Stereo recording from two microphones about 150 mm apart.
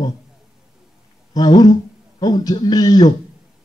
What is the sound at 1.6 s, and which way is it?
Speech, 25° left (ahead or behind).